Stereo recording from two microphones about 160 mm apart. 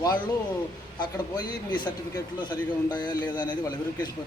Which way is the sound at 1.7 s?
25° left (ahead or behind).